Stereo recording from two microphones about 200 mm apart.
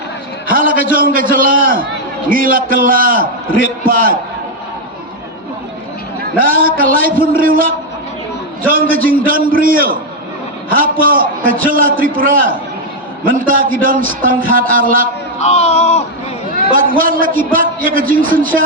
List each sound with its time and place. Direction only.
0.4 s a man's voice: 45° right (ahead or behind)
6.3 s a man's voice: 45° right (ahead or behind)
15.4 s speech: 35° left (ahead or behind)
16.7 s a man's voice: 45° right (ahead or behind)